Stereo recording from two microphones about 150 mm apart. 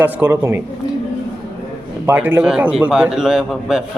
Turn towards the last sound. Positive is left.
turn(degrees=-5)  # may be behind; listen again after turning